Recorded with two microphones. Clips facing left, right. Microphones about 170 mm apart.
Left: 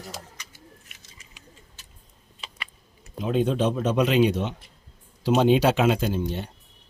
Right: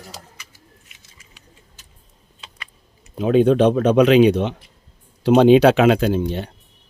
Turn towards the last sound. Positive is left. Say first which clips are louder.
# right 7 dB
turn(degrees=-80)